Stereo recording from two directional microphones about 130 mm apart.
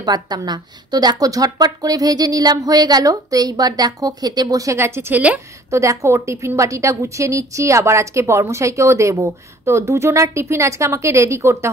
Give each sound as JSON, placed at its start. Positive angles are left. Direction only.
{"t": 0.0, "sound": "a woman's voice", "side_deg": -30}
{"t": 5.7, "sound": "a woman's voice", "side_deg": -25}